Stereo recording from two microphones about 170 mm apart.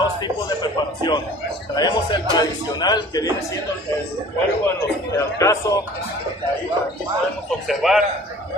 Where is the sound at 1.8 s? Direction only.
25° left (ahead or behind).